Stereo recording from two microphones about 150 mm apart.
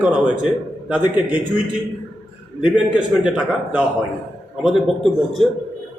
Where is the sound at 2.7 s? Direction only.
10° right (ahead or behind).